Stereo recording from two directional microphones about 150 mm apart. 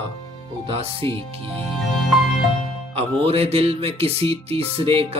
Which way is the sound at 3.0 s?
40° right (ahead or behind).